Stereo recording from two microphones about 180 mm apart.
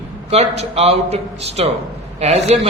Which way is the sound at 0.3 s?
35° right (ahead or behind).